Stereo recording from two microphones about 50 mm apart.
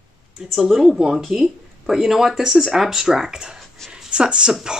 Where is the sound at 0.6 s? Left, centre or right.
Centre.